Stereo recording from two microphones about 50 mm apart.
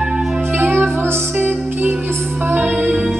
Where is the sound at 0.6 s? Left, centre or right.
Right.